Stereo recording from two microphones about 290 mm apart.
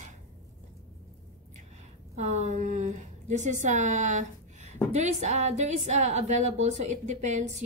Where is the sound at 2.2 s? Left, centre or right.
Right.